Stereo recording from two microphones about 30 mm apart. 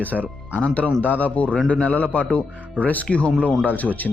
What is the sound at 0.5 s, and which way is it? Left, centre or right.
Speech, left.